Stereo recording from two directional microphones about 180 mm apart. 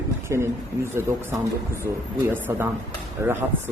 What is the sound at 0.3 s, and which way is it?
A man's voice, 15° right (ahead or behind).